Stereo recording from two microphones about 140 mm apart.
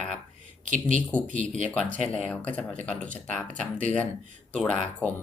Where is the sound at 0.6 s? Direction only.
65° right (ahead or behind).